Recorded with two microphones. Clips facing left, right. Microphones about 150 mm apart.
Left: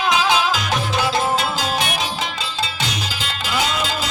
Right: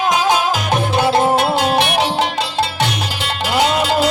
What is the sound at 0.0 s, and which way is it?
Music, 45° right (ahead or behind).